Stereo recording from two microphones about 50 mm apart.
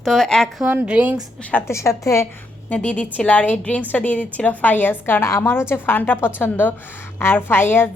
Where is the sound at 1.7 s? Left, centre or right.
Left.